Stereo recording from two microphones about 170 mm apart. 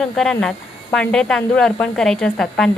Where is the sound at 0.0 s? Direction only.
5° left (ahead or behind).